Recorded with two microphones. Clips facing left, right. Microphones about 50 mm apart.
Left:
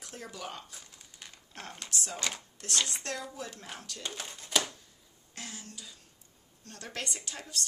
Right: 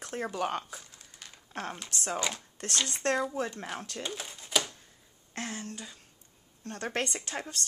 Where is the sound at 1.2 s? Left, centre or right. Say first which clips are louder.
Even; centre.